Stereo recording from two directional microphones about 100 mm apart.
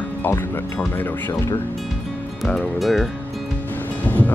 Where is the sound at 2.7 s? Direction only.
Centre (ahead or behind).